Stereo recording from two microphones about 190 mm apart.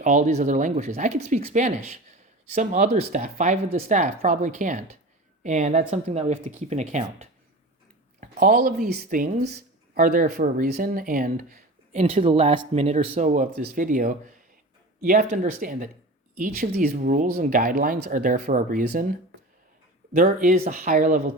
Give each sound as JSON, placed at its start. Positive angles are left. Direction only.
{"t": 0.0, "sound": "a woman's voice", "side_deg": -40}
{"t": 8.2, "sound": "speech", "side_deg": -50}
{"t": 20.1, "sound": "speech", "side_deg": -45}